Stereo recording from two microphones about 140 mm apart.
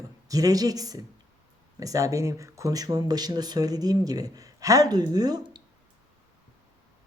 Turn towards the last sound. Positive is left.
turn(degrees=-30)  # may be behind; listen again after turning